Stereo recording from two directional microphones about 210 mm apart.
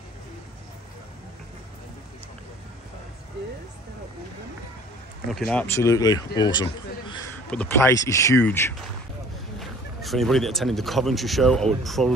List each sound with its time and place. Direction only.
5.3 s speech: 5° left (ahead or behind)
5.8 s speech: 15° left (ahead or behind)
9.6 s speech: centre (ahead or behind)